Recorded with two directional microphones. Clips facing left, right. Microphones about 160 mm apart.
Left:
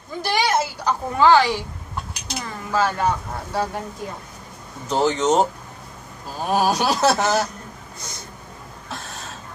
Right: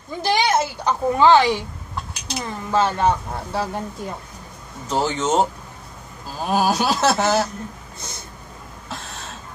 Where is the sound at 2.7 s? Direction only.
25° right (ahead or behind).